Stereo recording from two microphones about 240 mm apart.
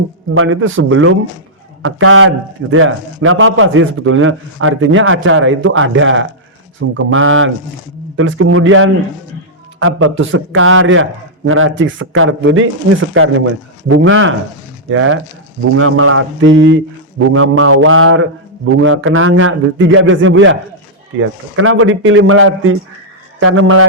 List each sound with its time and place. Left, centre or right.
0.3 s a man's voice: right